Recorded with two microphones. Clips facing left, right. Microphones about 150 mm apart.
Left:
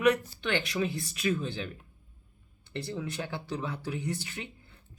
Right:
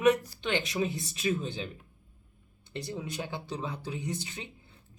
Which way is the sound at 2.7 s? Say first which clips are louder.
Left 1 dB; 15° right (ahead or behind).